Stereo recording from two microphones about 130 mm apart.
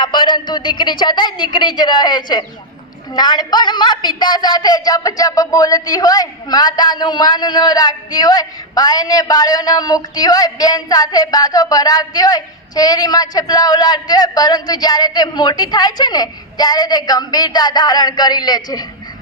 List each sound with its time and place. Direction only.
0.0 s a woman's voice: 40° left (ahead or behind)